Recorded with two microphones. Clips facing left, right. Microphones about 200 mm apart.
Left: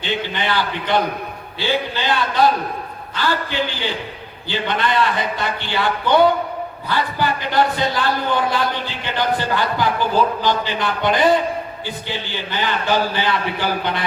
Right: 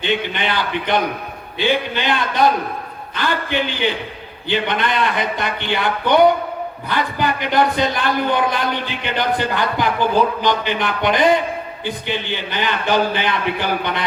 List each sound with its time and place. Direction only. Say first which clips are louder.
0.0 s a man's voice: right 2 dB; 20° right (ahead or behind)